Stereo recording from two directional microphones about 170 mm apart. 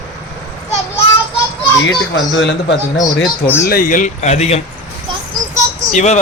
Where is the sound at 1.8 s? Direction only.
90° left.